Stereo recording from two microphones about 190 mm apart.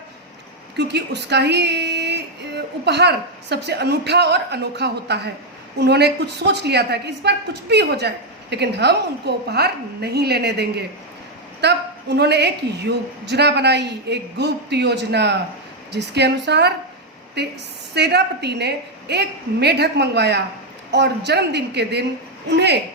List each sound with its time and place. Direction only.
0.8 s a woman's voice: 60° right (ahead or behind)
17.9 s a woman's voice: 60° right (ahead or behind)